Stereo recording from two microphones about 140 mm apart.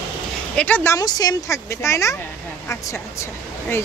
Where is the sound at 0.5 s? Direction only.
10° left (ahead or behind).